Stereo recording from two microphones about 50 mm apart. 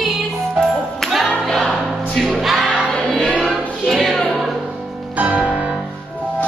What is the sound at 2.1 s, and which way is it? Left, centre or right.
Music, centre.